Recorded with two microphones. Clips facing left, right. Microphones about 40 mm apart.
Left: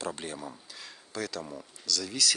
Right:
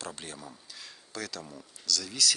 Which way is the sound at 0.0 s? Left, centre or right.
Centre.